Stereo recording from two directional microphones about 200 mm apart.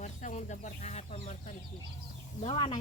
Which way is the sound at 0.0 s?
35° left (ahead or behind).